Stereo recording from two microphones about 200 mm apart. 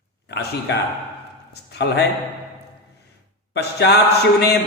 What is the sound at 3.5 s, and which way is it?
Mantra, 55° left (ahead or behind).